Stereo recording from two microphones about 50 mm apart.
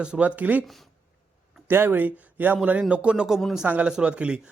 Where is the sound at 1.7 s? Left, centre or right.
Right.